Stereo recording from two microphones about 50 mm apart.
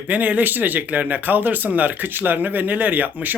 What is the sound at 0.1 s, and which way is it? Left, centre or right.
Speech, right.